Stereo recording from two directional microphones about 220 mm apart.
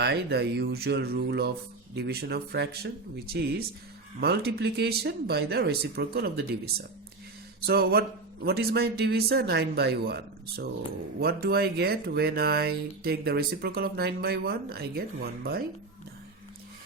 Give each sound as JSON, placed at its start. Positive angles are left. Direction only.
{"t": 0.0, "sound": "speech", "side_deg": -50}